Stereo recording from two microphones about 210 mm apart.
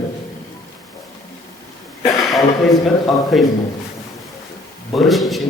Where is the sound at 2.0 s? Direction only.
15° left (ahead or behind).